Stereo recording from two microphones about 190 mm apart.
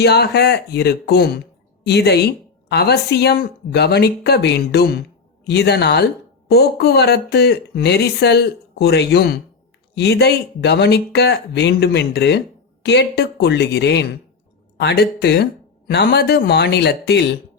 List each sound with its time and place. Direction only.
0.0 s a woman's voice: 60° left (ahead or behind)